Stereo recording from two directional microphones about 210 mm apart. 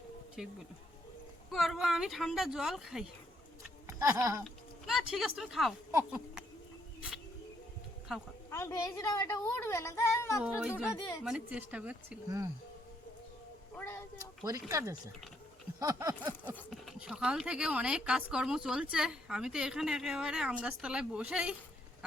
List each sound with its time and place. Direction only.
1.5 s speech: centre (ahead or behind)
3.8 s a sound: 15° right (ahead or behind)
4.4 s speech: centre (ahead or behind)
8.4 s a woman's voice: 15° left (ahead or behind)
10.4 s speech: 5° right (ahead or behind)
10.9 s a woman's voice: 20° left (ahead or behind)
11.2 s speech: 5° right (ahead or behind)
13.7 s a sound: 10° left (ahead or behind)
14.4 s speech: 15° right (ahead or behind)